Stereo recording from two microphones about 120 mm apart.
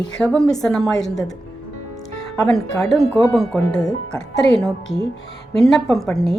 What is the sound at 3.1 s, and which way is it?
Speech, 20° left (ahead or behind).